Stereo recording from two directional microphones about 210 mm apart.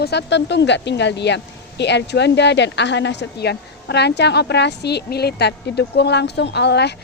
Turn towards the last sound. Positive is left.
turn(degrees=55)  # may be behind; listen again after turning